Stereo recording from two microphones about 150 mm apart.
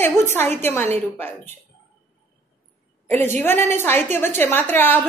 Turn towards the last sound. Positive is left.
turn(degrees=15)  # may be behind; listen again after turning